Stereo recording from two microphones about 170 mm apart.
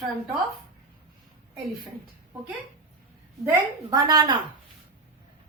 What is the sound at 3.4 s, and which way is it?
Speech, 20° right (ahead or behind).